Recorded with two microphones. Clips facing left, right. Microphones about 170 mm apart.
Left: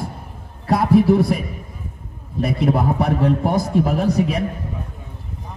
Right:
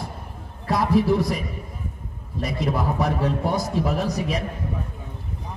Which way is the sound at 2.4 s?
60° left (ahead or behind).